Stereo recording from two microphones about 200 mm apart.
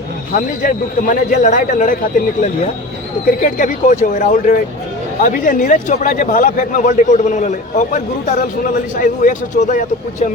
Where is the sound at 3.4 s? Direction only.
40° left (ahead or behind).